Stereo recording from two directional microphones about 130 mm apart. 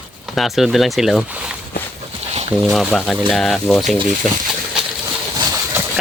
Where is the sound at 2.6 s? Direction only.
Centre (ahead or behind).